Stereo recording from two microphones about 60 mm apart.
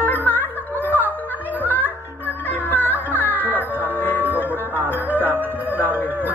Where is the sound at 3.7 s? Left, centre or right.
Right.